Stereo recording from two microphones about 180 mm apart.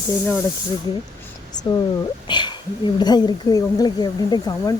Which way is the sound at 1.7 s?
30° left (ahead or behind).